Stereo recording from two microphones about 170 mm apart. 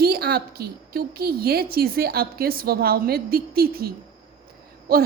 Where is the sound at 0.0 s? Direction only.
65° right (ahead or behind).